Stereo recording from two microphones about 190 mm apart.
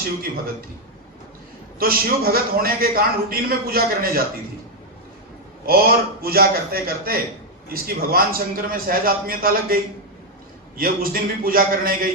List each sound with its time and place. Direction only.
1.8 s a man's voice: 50° right (ahead or behind)
5.6 s a man's voice: 50° right (ahead or behind)